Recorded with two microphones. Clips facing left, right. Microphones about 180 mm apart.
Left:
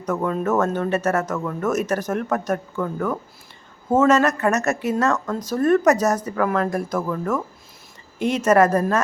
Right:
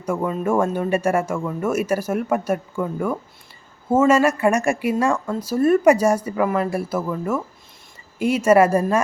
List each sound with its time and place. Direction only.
0.0 s speech: 10° right (ahead or behind)